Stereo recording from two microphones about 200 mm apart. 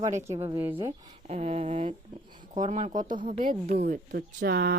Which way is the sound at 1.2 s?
35° right (ahead or behind).